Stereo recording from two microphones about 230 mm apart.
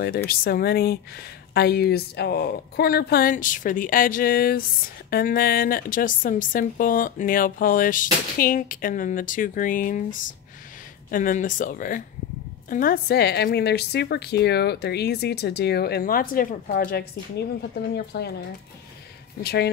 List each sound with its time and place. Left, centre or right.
0.3 s a woman's voice: left
19.4 s a woman's voice: left